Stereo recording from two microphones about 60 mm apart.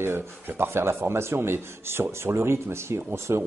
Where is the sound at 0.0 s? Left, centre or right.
Right.